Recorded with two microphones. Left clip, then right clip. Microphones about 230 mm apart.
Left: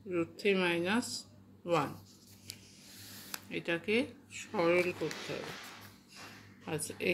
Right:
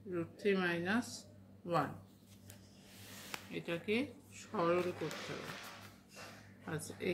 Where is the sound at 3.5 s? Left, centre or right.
Centre.